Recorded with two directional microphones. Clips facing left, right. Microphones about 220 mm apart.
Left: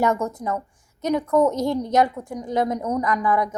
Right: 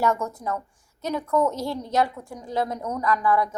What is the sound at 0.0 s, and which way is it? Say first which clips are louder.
A woman's voice: left 3 dB; 15° left (ahead or behind).